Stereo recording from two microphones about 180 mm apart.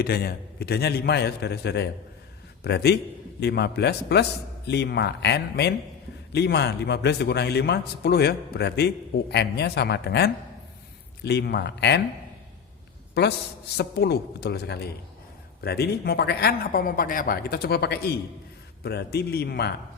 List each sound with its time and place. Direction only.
0.0 s a man's voice: 60° left (ahead or behind)
13.7 s speech: 65° left (ahead or behind)